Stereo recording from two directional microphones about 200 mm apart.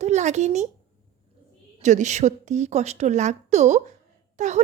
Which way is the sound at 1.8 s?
35° right (ahead or behind).